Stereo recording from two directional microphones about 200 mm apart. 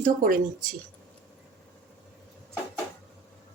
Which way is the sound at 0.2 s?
45° right (ahead or behind).